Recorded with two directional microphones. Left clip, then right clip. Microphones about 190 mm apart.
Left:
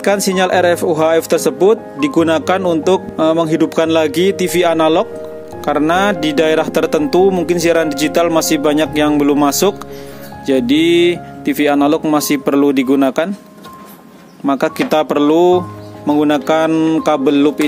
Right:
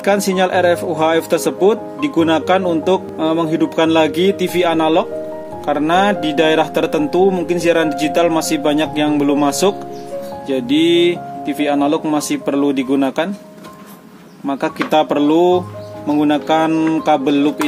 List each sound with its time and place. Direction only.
0.0 s speech: 40° left (ahead or behind)
14.4 s speech: 40° left (ahead or behind)